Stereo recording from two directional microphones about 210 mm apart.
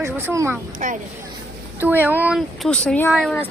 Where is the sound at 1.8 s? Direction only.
10° right (ahead or behind).